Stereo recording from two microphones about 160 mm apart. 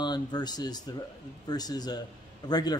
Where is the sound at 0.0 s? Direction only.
25° left (ahead or behind).